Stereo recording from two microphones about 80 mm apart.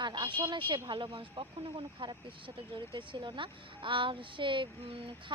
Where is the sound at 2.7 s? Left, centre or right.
Right.